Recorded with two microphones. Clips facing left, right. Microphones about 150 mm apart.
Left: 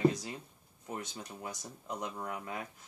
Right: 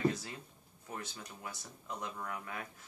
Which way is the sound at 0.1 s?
20° left (ahead or behind).